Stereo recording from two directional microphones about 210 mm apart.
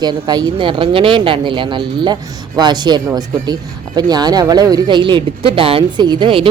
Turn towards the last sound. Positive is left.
turn(degrees=-25)  # may be behind; listen again after turning